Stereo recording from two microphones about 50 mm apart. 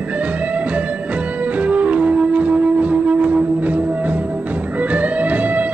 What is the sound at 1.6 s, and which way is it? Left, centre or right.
Music, right.